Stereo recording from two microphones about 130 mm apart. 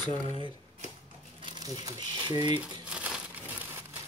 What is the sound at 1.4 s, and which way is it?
Crumpling, 35° right (ahead or behind).